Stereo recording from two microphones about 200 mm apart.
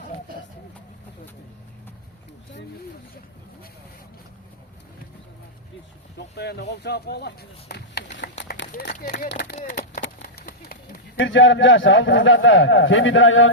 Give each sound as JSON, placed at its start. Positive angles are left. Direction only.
{"t": 6.1, "sound": "speech", "side_deg": 55}
{"t": 8.4, "sound": "run", "side_deg": 60}
{"t": 8.8, "sound": "speech", "side_deg": 55}
{"t": 9.9, "sound": "a sound", "side_deg": 40}
{"t": 11.3, "sound": "a man's voice", "side_deg": 70}